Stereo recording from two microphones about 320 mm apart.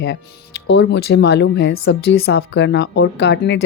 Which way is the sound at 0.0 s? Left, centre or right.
Left.